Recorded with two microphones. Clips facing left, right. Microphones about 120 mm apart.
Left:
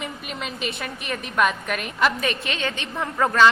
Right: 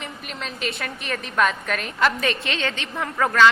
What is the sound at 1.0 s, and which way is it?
A woman's voice, 15° left (ahead or behind).